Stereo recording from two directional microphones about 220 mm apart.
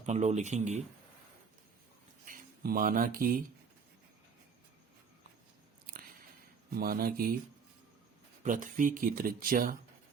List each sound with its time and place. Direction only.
0.0 s speech: 30° right (ahead or behind)
2.2 s speech: 40° right (ahead or behind)
6.7 s speech: 45° right (ahead or behind)
8.4 s speech: 35° right (ahead or behind)